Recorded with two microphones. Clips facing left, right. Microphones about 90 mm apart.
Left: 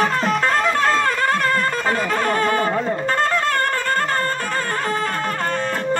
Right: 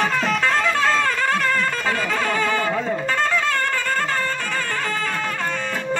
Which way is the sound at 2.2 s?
45° left (ahead or behind).